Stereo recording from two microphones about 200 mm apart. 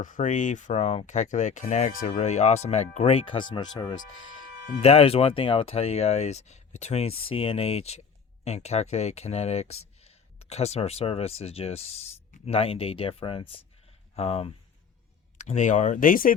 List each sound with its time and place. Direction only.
0.0 s speech: 40° left (ahead or behind)